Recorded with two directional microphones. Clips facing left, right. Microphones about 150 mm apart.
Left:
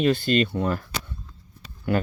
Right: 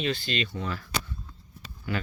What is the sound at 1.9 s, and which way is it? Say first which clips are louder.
Speech: left 8 dB; 55° left (ahead or behind).